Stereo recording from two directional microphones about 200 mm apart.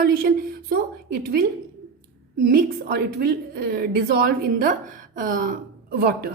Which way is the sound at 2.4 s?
50° right (ahead or behind).